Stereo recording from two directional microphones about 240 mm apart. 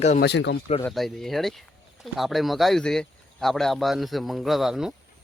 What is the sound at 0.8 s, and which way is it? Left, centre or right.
Speech, centre.